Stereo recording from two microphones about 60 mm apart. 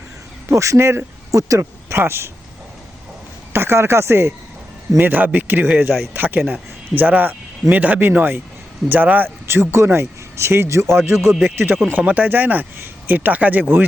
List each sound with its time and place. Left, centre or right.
0.5 s speech: right
2.0 s speech: right
3.5 s speech: right
4.9 s a man's voice: right
12.0 s speech: right